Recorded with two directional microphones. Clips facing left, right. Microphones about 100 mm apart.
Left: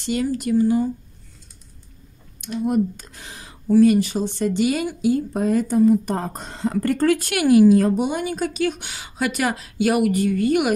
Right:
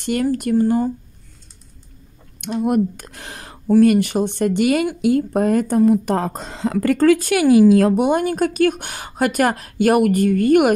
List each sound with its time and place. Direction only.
0.0 s speech: 55° right (ahead or behind)
2.4 s speech: 65° right (ahead or behind); by 7.0 s 90° right
7.7 s speech: 70° right (ahead or behind); by 10.7 s 50° right (ahead or behind)